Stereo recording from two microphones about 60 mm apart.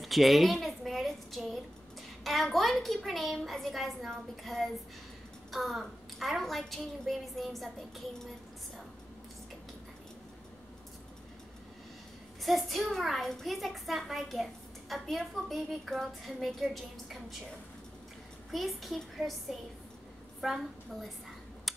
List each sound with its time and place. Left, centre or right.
0.0 s a sound: centre
2.4 s a child's voice: centre
12.4 s a child's voice: centre
18.5 s a child's voice: centre
20.3 s a woman's voice: centre
21.7 s a sound: centre